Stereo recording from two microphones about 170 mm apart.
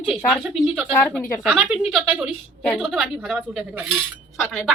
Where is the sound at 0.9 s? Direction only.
10° left (ahead or behind).